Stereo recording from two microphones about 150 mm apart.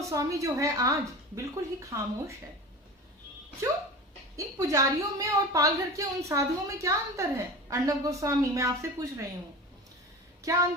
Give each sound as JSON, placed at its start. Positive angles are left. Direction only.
{"t": 0.0, "sound": "a woman's voice", "side_deg": -20}
{"t": 4.4, "sound": "a woman's voice", "side_deg": -20}
{"t": 10.4, "sound": "speech", "side_deg": -20}